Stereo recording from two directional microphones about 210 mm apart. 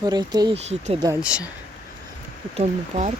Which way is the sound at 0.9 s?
15° right (ahead or behind).